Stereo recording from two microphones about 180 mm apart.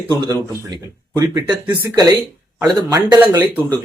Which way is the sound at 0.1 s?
20° right (ahead or behind).